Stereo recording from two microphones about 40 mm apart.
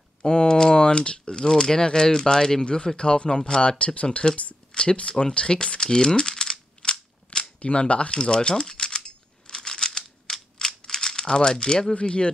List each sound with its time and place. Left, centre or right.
0.2 s speech: left
5.2 s a sound: left
7.6 s typewriter: left
10.9 s speech: centre
11.9 s speech: left